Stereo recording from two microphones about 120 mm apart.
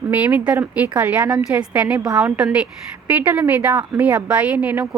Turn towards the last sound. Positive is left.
turn(degrees=-15)  # may be behind; listen again after turning